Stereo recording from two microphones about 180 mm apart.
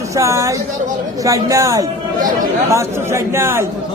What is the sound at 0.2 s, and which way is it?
A man's voice, 15° right (ahead or behind).